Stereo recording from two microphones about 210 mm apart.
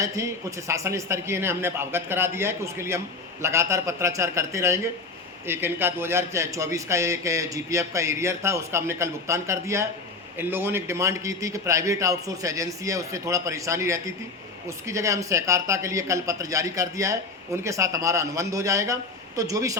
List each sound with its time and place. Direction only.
0.0 s a man's voice: 15° right (ahead or behind)